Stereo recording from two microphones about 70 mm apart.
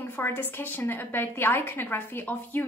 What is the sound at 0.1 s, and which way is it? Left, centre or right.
A woman's voice, left.